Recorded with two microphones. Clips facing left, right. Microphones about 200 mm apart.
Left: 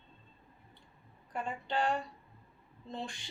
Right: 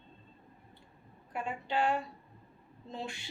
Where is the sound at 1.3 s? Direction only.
5° right (ahead or behind).